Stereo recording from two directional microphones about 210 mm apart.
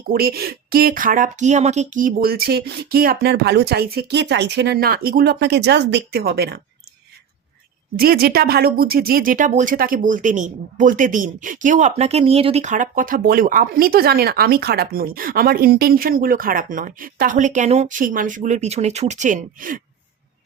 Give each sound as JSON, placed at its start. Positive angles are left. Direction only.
{"t": 0.1, "sound": "speech", "side_deg": -45}
{"t": 7.9, "sound": "speech", "side_deg": -45}